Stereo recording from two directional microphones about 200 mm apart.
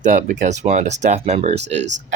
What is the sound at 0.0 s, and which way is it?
Speech, 40° right (ahead or behind).